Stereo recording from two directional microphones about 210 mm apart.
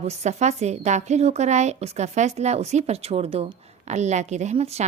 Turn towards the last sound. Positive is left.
turn(degrees=-30)  # may be behind; listen again after turning